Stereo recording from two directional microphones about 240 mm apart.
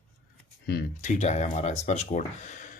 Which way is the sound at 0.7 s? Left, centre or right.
Left.